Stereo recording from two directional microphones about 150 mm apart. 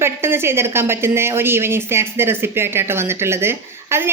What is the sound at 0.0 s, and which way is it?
A woman's voice, 15° right (ahead or behind).